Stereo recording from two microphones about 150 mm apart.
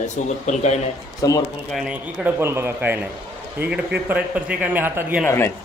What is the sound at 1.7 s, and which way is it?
Speech, 5° right (ahead or behind).